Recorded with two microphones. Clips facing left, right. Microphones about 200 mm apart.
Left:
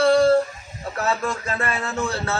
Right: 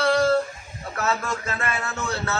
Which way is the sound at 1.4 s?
30° left (ahead or behind).